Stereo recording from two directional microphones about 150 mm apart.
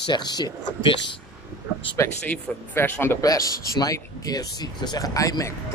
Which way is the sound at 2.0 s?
15° left (ahead or behind).